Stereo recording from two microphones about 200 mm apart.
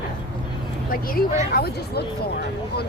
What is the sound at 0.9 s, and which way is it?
Speech, 45° left (ahead or behind).